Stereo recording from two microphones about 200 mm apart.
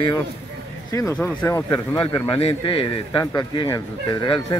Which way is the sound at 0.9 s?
15° left (ahead or behind).